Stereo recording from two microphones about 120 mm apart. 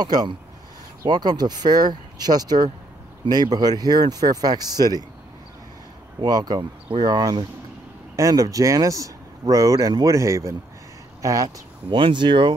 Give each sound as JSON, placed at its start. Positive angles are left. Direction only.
{"t": 0.0, "sound": "speech", "side_deg": -35}
{"t": 6.2, "sound": "speech", "side_deg": -35}